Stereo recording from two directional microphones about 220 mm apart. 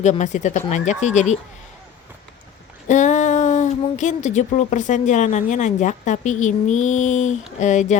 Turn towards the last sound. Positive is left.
turn(degrees=35)  # may be behind; listen again after turning